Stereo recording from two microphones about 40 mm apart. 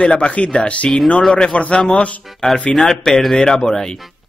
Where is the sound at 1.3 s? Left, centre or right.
Centre.